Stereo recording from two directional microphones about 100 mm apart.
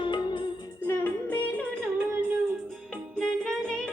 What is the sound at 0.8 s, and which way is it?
Music, 25° left (ahead or behind).